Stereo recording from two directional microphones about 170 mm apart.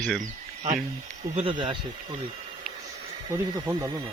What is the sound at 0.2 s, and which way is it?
Speech, 45° right (ahead or behind).